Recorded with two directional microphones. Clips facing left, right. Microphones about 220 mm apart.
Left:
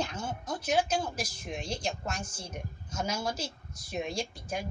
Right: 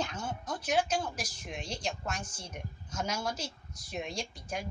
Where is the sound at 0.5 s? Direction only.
25° left (ahead or behind).